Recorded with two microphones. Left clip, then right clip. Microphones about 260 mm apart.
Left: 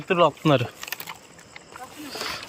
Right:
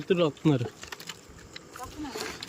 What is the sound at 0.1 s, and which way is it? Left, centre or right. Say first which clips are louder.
Speech: left 6 dB; centre.